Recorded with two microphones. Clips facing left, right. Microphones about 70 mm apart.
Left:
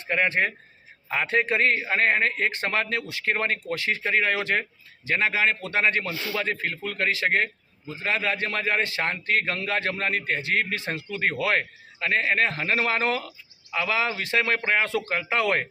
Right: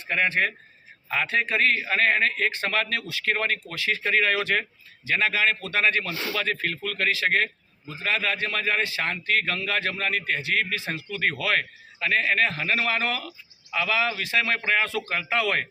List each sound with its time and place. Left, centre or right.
0.1 s speech: left
6.1 s a man's voice: centre
6.3 s speech: left